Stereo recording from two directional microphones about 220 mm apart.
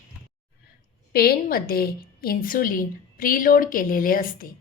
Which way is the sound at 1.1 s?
45° left (ahead or behind).